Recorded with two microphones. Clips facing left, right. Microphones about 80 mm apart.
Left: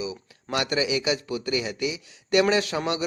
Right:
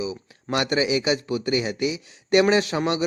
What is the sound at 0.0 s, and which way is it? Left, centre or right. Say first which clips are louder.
Speech: right 3 dB; right.